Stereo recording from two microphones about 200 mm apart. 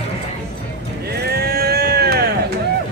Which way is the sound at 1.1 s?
50° right (ahead or behind).